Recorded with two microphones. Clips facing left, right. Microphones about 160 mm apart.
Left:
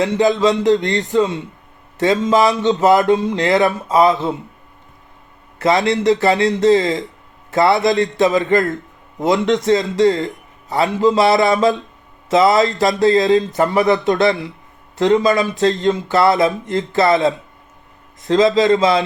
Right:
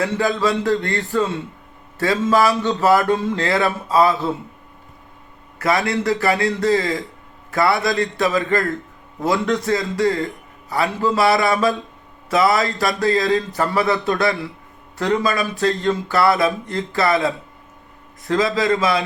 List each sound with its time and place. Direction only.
0.0 s speech: 20° left (ahead or behind)
5.5 s speech: 20° left (ahead or behind)